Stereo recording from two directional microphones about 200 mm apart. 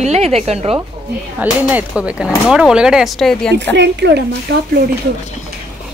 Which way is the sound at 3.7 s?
60° right (ahead or behind).